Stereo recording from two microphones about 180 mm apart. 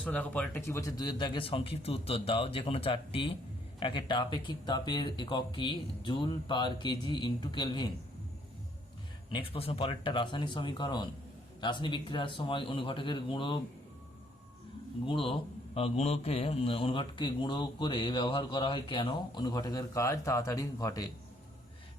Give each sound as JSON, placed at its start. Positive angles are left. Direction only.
{"t": 0.0, "sound": "a man's voice", "side_deg": 5}
{"t": 9.3, "sound": "a man's voice", "side_deg": 30}
{"t": 15.0, "sound": "a man's voice", "side_deg": 30}